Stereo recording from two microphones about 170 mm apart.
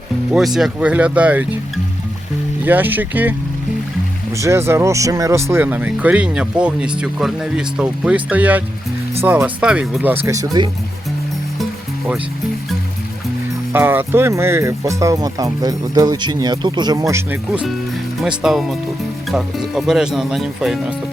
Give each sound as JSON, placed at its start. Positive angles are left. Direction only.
{"t": 0.3, "sound": "speech", "side_deg": -5}
{"t": 13.7, "sound": "speech", "side_deg": -10}
{"t": 18.2, "sound": "speech", "side_deg": 0}